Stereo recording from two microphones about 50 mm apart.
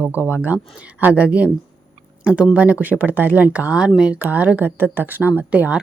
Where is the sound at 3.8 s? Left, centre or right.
Centre.